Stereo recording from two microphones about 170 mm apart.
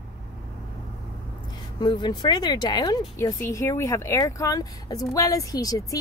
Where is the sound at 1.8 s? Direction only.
25° left (ahead or behind).